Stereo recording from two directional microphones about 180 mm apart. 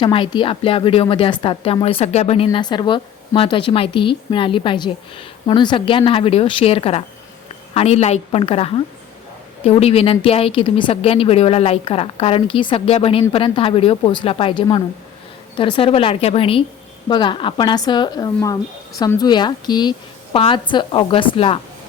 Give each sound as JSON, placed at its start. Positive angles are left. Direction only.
{"t": 0.0, "sound": "a woman's voice", "side_deg": 25}